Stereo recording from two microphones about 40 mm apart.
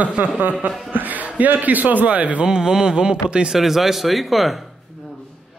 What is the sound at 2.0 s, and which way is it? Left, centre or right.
Speech, right.